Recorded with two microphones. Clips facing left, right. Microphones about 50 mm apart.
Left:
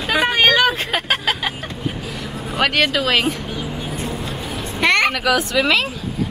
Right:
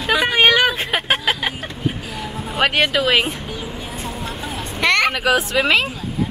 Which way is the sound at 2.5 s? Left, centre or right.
Right.